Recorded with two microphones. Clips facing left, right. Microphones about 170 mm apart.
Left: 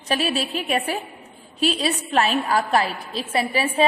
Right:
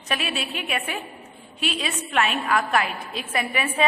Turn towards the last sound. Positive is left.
turn(degrees=30)  # may be behind; listen again after turning